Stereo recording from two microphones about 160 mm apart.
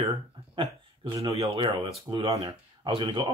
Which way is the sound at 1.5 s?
30° right (ahead or behind).